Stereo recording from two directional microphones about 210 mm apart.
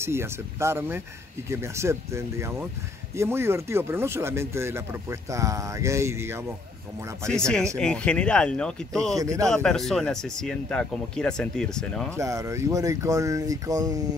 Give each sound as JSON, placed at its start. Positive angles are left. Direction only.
{"t": 0.0, "sound": "speech", "side_deg": -10}
{"t": 7.2, "sound": "speech", "side_deg": 5}
{"t": 9.1, "sound": "speech", "side_deg": -15}
{"t": 9.5, "sound": "speech", "side_deg": 0}
{"t": 12.2, "sound": "speech", "side_deg": -15}